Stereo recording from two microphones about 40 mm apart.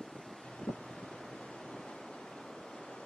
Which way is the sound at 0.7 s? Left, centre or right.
Left.